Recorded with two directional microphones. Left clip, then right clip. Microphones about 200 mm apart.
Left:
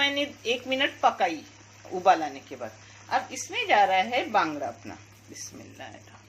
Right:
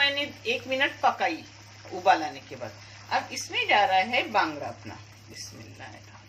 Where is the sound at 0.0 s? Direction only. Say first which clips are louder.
Right 1 dB; 45° left (ahead or behind).